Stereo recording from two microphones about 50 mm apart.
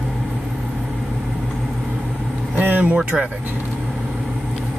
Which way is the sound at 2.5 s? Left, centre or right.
Right.